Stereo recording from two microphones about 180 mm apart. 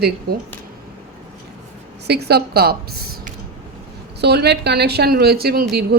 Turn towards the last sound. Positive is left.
turn(degrees=-60)  # may be behind; listen again after turning